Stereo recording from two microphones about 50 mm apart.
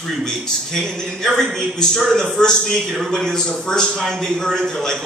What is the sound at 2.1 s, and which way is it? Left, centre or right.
A man's voice, centre.